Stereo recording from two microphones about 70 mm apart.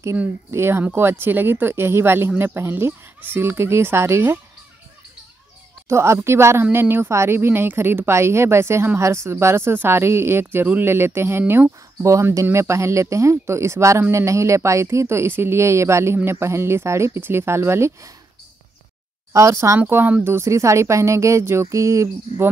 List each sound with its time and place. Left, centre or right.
0.5 s a woman's voice: right
5.9 s a woman's voice: right
12.0 s a woman's voice: right
19.3 s speech: right
19.9 s speech: right